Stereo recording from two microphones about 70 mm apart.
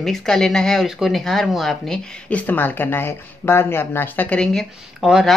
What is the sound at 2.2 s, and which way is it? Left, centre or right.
Speech, left.